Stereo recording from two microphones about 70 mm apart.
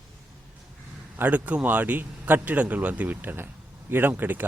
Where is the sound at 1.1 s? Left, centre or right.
Right.